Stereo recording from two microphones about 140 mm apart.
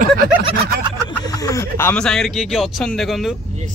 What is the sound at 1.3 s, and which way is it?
Speech, 25° left (ahead or behind).